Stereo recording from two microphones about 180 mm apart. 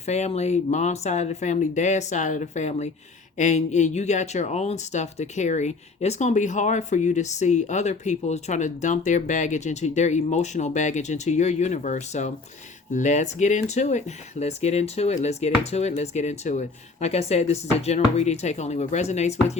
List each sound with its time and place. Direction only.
0.0 s speech: 40° left (ahead or behind)